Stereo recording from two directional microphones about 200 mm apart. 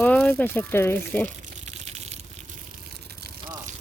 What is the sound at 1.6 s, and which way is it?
Gush, 35° right (ahead or behind).